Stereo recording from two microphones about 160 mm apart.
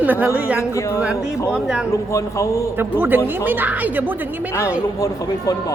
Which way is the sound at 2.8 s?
15° right (ahead or behind).